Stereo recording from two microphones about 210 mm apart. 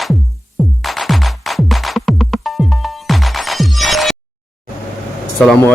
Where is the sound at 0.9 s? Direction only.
Centre (ahead or behind).